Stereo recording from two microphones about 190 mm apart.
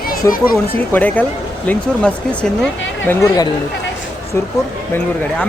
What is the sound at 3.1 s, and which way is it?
Speech, 20° left (ahead or behind).